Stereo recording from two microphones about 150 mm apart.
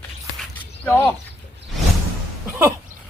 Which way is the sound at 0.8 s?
15° left (ahead or behind).